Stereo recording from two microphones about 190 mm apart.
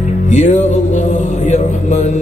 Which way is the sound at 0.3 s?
40° left (ahead or behind).